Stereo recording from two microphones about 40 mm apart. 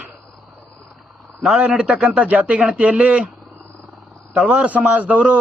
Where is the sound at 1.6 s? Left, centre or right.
Centre.